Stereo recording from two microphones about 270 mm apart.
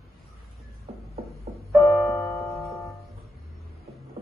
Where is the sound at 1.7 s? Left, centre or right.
Centre.